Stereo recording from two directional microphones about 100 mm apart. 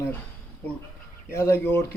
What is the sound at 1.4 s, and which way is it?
Speech, 25° left (ahead or behind).